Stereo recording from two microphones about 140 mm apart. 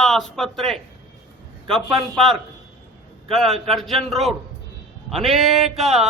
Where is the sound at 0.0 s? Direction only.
5° left (ahead or behind).